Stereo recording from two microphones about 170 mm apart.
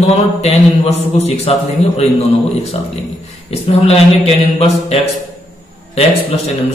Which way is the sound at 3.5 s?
35° left (ahead or behind).